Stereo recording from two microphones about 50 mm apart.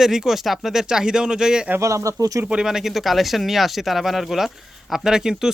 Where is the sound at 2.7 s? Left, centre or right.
Centre.